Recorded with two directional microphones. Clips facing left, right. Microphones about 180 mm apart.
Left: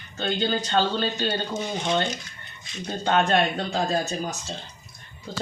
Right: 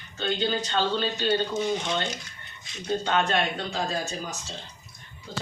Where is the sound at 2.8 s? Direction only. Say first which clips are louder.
Left 2 dB; 45° left (ahead or behind).